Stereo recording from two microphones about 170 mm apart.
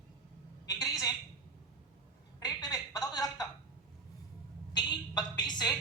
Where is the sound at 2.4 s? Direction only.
20° left (ahead or behind).